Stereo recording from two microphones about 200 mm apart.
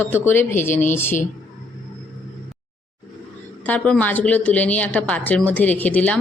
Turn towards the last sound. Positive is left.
turn(degrees=5)  # may be behind; listen again after turning